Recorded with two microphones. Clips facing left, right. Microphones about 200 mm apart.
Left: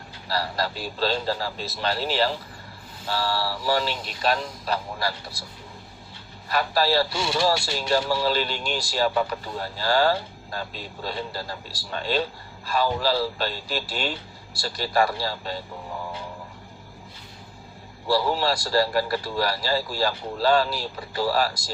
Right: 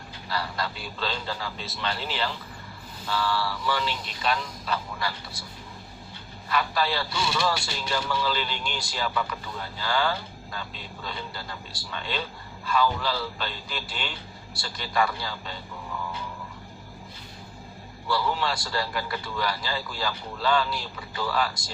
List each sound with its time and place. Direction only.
0.3 s speech: 35° left (ahead or behind)
6.5 s speech: 40° left (ahead or behind)
15.9 s music: 35° left (ahead or behind)
18.1 s speech: 35° left (ahead or behind)